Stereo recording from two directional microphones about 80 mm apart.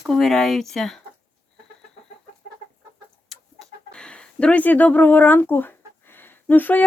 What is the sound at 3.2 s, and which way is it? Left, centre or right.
Chicken, centre.